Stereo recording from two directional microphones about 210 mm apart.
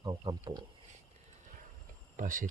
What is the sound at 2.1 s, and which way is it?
Speech, 40° right (ahead or behind).